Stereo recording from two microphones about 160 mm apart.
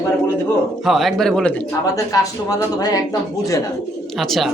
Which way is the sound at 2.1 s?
20° left (ahead or behind).